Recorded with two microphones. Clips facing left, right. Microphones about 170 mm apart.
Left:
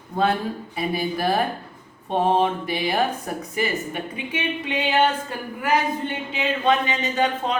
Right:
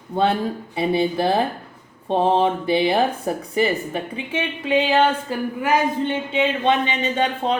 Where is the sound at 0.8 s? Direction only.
25° right (ahead or behind).